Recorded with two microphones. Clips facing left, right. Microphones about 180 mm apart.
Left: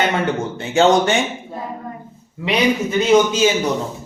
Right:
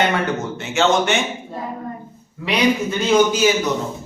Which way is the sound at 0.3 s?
30° left (ahead or behind).